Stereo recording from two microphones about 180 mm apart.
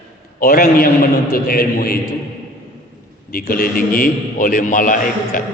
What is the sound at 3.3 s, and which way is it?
Mantra, 55° left (ahead or behind).